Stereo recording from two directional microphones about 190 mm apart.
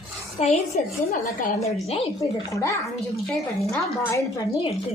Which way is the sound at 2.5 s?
15° left (ahead or behind).